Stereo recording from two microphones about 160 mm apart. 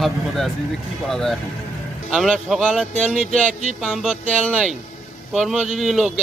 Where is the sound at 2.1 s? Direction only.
5° right (ahead or behind).